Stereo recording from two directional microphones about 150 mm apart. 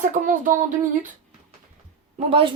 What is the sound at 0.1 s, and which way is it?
Speech, 60° right (ahead or behind).